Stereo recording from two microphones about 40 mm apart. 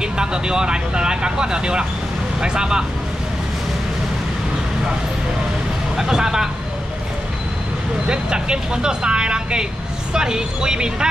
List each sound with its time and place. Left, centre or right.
0.0 s speech: right
5.9 s speech: centre
8.1 s speech: right